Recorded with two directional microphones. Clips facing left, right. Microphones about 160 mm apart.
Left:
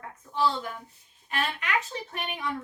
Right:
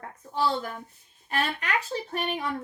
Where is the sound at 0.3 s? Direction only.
40° right (ahead or behind).